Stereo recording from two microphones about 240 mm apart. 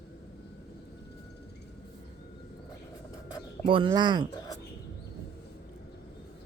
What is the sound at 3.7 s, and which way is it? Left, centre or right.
Speech, centre.